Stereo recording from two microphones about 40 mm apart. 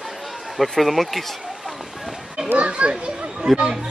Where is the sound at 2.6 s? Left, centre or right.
Right.